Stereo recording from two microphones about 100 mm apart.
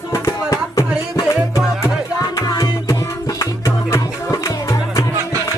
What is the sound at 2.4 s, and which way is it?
Music, 40° left (ahead or behind).